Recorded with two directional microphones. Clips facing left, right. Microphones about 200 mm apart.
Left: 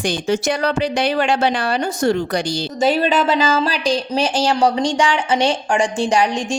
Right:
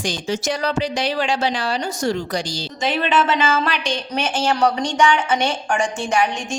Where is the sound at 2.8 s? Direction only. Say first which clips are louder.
Left 3 dB; 40° left (ahead or behind).